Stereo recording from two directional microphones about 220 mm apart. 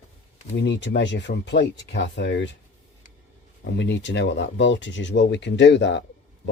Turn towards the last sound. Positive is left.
turn(degrees=55)  # may be behind; listen again after turning